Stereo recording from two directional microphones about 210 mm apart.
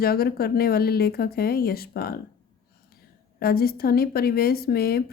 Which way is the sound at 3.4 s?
45° left (ahead or behind).